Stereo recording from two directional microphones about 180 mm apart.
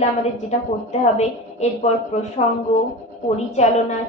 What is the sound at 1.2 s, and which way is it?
A woman's voice, 40° left (ahead or behind).